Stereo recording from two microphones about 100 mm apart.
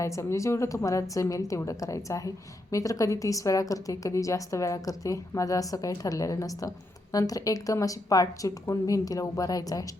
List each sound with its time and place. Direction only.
0.0 s a woman's voice: 30° left (ahead or behind)